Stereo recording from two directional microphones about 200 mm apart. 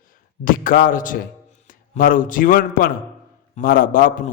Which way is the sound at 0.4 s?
45° left (ahead or behind).